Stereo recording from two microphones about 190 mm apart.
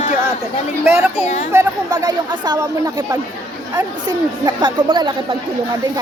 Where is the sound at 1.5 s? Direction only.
20° right (ahead or behind).